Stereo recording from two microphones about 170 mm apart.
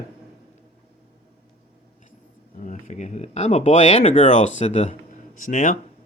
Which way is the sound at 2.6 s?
45° left (ahead or behind).